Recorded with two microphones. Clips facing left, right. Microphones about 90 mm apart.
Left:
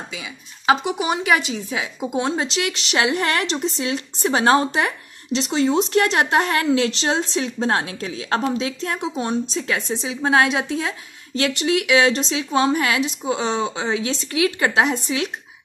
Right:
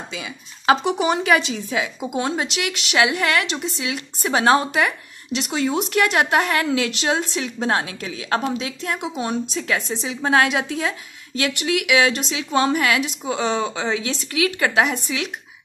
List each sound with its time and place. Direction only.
0.7 s a woman's voice: 10° left (ahead or behind); by 15.2 s 25° left (ahead or behind)